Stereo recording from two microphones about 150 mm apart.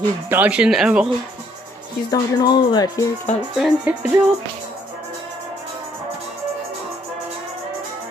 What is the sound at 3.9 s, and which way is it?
Speech, 10° right (ahead or behind).